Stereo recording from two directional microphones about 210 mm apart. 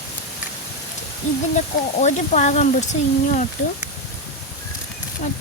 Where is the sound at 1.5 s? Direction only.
35° left (ahead or behind).